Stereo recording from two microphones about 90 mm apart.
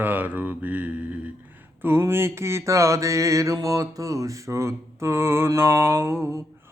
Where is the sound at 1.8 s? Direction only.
25° right (ahead or behind).